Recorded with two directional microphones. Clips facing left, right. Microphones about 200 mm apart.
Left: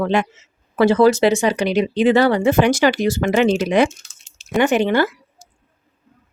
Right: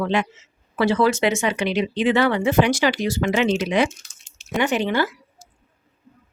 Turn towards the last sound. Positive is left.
turn(degrees=55)  # may be behind; listen again after turning